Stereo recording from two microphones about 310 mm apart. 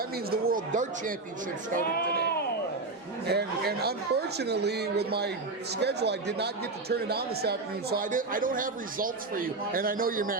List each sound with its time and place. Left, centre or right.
0.3 s speech: right
1.8 s speech: left
3.2 s speech: right